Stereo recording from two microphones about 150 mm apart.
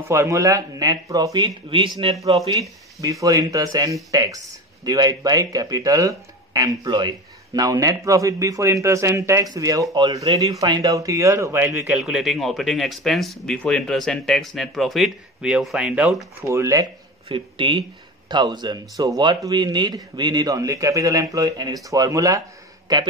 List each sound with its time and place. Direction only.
0.1 s speech: 20° right (ahead or behind)
3.0 s speech: 25° right (ahead or behind)
12.0 s speech: 5° right (ahead or behind)
16.4 s speech: 20° right (ahead or behind)
17.3 s speech: 35° right (ahead or behind)